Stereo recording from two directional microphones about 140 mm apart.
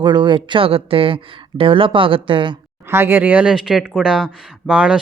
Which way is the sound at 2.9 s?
15° right (ahead or behind).